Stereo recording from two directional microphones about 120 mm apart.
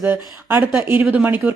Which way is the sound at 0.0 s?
20° right (ahead or behind).